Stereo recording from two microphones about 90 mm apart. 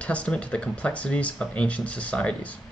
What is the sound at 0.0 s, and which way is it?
Speech, 15° left (ahead or behind).